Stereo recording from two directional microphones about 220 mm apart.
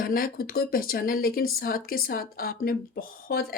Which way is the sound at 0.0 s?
40° left (ahead or behind).